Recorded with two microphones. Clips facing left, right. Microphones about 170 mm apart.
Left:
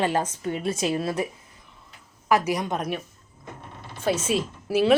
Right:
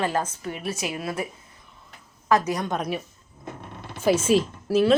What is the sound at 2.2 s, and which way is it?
Speech, 10° left (ahead or behind).